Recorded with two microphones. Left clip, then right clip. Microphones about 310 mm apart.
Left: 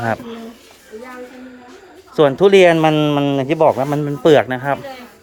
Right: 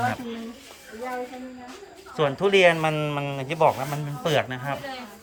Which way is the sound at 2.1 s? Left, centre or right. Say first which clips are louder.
Left 10 dB; centre.